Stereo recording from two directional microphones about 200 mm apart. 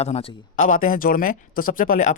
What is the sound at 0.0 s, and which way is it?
Speech, 30° left (ahead or behind).